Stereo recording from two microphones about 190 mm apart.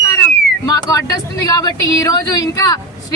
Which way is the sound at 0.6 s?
20° left (ahead or behind).